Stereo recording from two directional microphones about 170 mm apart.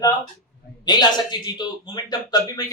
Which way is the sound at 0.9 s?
25° left (ahead or behind).